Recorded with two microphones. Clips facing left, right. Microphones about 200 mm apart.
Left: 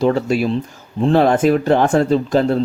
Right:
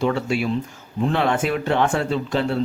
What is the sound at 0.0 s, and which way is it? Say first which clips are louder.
Speech: left 5 dB; 40° left (ahead or behind).